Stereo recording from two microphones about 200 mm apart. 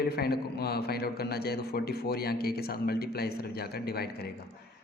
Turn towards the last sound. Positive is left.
turn(degrees=50)  # may be behind; listen again after turning